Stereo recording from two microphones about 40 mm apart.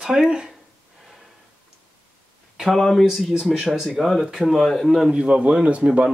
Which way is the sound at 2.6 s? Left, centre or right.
Centre.